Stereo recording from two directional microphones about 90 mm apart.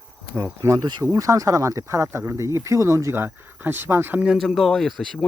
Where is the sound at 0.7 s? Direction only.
55° right (ahead or behind).